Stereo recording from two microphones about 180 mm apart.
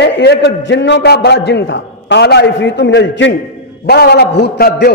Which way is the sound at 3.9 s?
65° left (ahead or behind).